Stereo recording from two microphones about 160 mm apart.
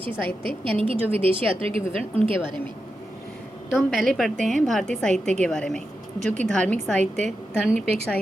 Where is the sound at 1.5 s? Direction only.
35° right (ahead or behind).